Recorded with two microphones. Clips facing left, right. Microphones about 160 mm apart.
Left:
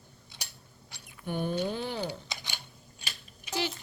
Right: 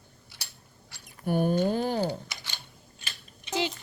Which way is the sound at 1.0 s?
40° right (ahead or behind).